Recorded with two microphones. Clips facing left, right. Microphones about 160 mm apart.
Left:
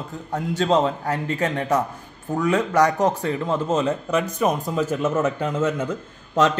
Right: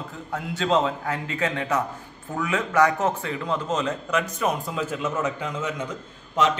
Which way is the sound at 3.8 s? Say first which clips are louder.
Left 4 dB; 30° left (ahead or behind).